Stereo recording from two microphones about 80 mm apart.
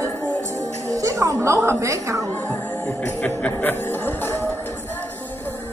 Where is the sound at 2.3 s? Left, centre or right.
Centre.